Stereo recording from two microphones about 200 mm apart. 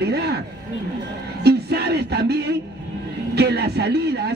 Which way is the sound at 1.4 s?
55° right (ahead or behind).